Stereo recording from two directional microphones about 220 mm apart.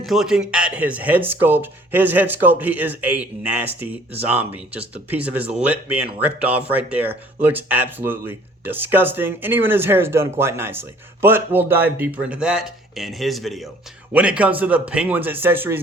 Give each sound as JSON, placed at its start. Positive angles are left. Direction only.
{"t": 0.0, "sound": "speech", "side_deg": 0}